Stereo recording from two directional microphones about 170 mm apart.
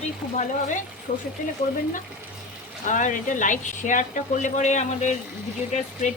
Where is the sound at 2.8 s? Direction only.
50° left (ahead or behind).